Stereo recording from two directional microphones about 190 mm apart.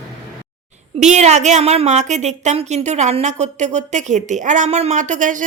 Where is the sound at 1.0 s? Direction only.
40° right (ahead or behind).